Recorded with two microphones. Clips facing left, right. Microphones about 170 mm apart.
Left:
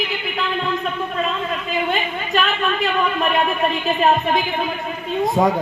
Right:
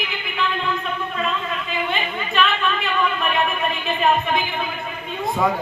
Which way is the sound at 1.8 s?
40° left (ahead or behind).